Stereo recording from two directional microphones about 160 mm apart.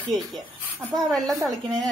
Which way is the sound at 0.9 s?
Centre (ahead or behind).